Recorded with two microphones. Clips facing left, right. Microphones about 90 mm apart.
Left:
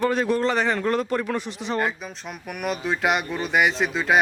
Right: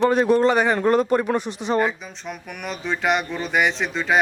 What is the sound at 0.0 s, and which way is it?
Speech, 20° right (ahead or behind).